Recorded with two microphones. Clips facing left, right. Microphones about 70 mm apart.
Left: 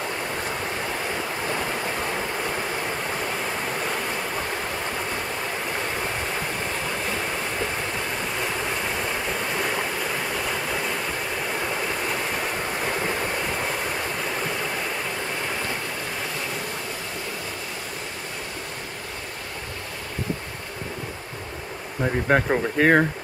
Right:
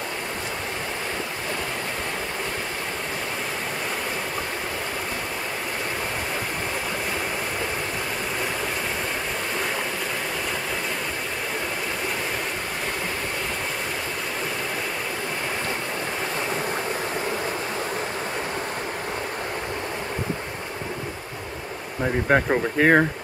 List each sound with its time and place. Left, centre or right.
22.0 s speech: centre